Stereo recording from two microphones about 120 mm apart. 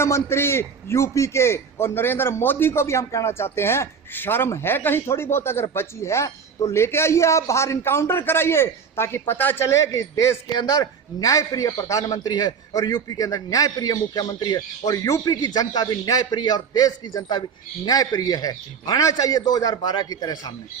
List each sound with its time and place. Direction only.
0.0 s a man's voice: 20° left (ahead or behind)